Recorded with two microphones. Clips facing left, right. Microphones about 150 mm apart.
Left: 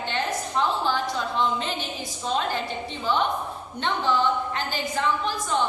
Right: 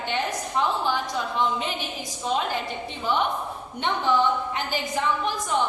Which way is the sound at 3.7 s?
15° right (ahead or behind).